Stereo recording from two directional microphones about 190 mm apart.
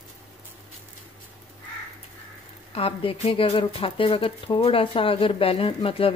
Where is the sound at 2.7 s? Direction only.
30° left (ahead or behind).